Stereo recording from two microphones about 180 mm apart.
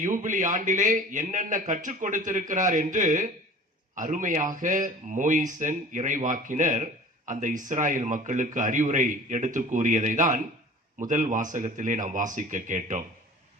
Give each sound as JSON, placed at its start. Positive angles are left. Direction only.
{"t": 0.0, "sound": "speech", "side_deg": -45}